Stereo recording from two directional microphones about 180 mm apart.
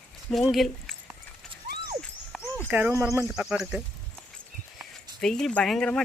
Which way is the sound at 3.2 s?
5° right (ahead or behind).